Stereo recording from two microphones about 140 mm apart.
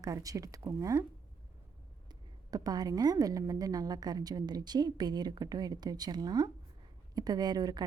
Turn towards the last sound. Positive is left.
turn(degrees=-30)  # may be behind; listen again after turning